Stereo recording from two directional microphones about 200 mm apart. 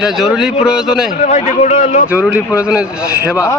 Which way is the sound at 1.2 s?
35° left (ahead or behind).